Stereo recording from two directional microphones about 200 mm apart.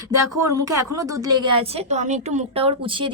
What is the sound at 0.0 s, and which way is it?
A woman's voice, 15° right (ahead or behind).